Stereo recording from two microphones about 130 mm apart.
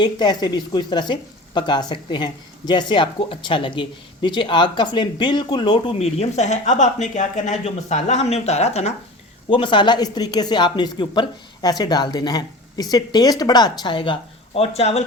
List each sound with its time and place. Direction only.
0.0 s speech: 30° left (ahead or behind)
6.0 s speech: 55° left (ahead or behind)
9.5 s speech: 40° left (ahead or behind); by 15.0 s 55° left (ahead or behind)